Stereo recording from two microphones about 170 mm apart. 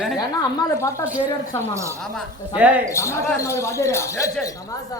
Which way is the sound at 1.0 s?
10° right (ahead or behind).